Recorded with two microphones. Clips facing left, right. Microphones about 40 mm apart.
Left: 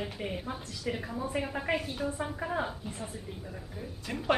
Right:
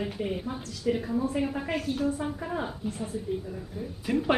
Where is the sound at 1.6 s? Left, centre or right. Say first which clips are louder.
Right 3 dB; centre.